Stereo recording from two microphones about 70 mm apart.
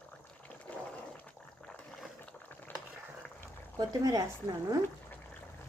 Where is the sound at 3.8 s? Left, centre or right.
Right.